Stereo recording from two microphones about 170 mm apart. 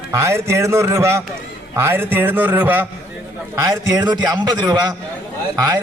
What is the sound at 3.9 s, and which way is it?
A man's voice, 25° right (ahead or behind).